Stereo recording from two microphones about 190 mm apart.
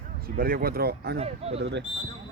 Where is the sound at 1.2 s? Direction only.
35° right (ahead or behind).